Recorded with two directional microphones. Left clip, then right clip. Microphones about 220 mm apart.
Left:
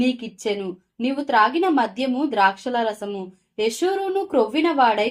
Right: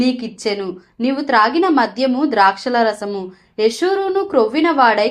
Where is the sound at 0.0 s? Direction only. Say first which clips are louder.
Right 5 dB; 20° right (ahead or behind).